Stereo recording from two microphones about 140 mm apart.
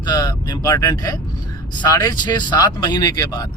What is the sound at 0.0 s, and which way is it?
Speech, 30° left (ahead or behind).